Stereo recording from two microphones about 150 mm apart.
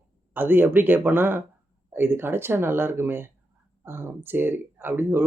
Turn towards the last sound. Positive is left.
turn(degrees=-15)  # may be behind; listen again after turning